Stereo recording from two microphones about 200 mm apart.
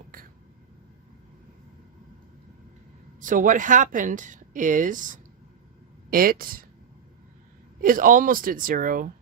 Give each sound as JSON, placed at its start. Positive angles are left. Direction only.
{"t": 3.2, "sound": "speech", "side_deg": -40}
{"t": 7.8, "sound": "speech", "side_deg": -40}